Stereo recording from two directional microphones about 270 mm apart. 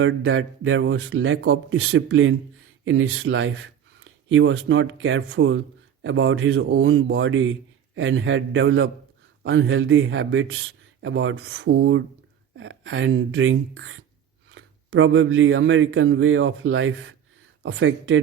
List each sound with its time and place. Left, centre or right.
0.0 s speech: right